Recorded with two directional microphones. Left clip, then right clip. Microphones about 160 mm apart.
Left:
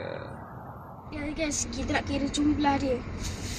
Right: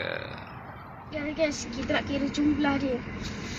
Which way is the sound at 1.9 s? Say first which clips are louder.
Right 1 dB; 35° left (ahead or behind).